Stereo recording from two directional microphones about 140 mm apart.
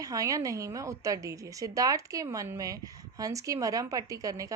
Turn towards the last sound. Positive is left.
turn(degrees=-25)  # may be behind; listen again after turning